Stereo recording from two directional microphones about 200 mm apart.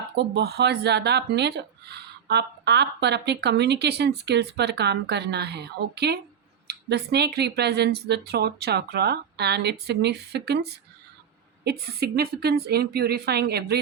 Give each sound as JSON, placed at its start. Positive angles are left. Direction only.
{"t": 0.2, "sound": "speech", "side_deg": -55}